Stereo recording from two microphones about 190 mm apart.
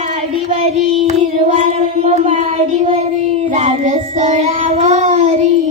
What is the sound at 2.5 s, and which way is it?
Child singing, 30° right (ahead or behind).